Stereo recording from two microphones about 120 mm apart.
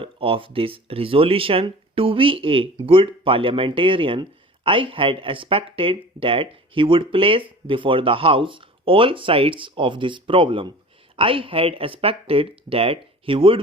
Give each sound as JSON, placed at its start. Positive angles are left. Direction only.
{"t": 0.0, "sound": "speech", "side_deg": -50}